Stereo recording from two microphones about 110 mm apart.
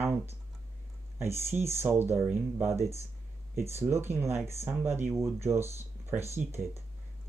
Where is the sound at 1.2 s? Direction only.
25° right (ahead or behind).